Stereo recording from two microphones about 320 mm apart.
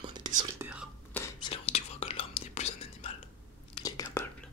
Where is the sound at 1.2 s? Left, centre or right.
Centre.